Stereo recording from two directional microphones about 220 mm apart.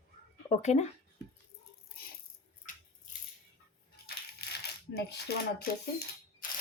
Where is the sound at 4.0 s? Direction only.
45° left (ahead or behind).